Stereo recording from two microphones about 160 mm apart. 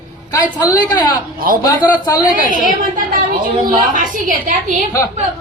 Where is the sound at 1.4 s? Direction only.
65° right (ahead or behind).